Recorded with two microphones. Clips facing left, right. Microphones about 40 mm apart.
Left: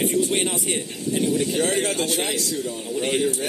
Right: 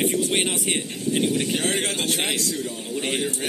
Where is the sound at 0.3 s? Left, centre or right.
Right.